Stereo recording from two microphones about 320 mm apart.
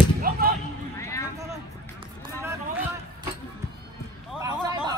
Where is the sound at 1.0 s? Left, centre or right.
Centre.